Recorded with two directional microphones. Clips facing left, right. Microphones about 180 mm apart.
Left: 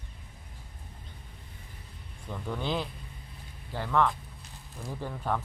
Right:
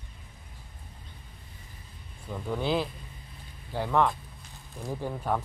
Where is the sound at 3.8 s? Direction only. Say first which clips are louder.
Right 1 dB; 15° right (ahead or behind).